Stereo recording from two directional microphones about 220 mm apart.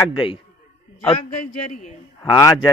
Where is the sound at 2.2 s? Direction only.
20° left (ahead or behind).